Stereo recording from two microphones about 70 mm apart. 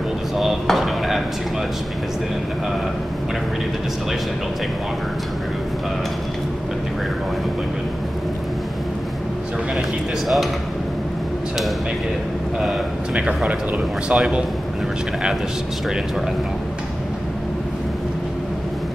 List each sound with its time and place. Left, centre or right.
0.4 s speech: centre
9.8 s speech: centre
12.6 s a man's voice: centre